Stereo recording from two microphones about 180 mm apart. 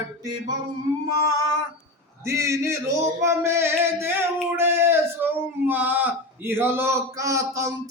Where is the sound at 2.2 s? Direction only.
15° right (ahead or behind).